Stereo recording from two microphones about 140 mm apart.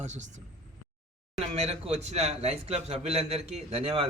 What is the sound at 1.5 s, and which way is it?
A man's voice, 45° right (ahead or behind).